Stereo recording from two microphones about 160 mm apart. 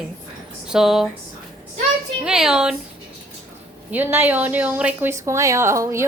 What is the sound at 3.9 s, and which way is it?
Speech, 15° right (ahead or behind).